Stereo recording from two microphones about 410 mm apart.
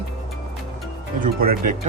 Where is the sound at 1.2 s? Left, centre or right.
Right.